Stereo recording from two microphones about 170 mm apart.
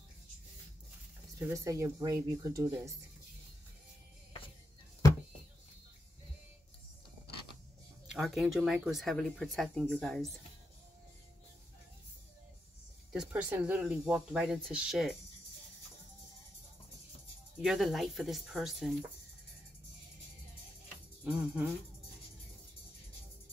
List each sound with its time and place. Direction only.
1.5 s speech: 20° right (ahead or behind)
8.1 s speech: centre (ahead or behind)
13.1 s speech: 5° right (ahead or behind)
17.6 s speech: centre (ahead or behind)
21.2 s music: 5° right (ahead or behind)